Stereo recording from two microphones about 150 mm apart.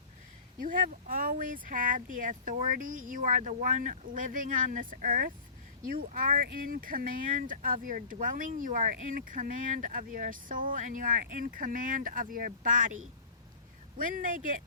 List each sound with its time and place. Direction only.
0.6 s speech: 65° right (ahead or behind)
14.0 s speech: 65° right (ahead or behind)